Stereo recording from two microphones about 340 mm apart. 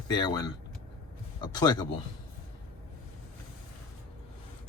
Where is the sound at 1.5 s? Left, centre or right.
Centre.